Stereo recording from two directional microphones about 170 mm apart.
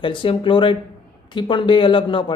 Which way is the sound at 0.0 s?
30° left (ahead or behind).